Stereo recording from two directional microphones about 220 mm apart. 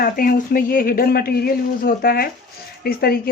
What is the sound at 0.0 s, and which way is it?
Speech, 40° left (ahead or behind).